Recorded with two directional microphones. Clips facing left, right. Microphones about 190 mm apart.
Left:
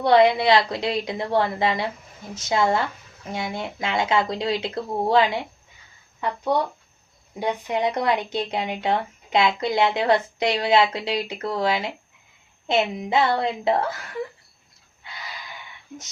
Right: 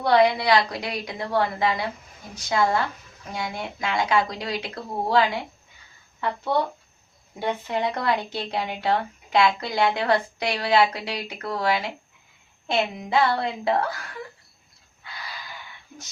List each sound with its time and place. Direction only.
0.0 s a woman's voice: 25° left (ahead or behind)
7.3 s a woman's voice: 15° left (ahead or behind)